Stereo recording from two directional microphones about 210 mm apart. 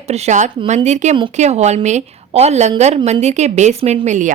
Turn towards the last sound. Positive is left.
turn(degrees=-35)  # may be behind; listen again after turning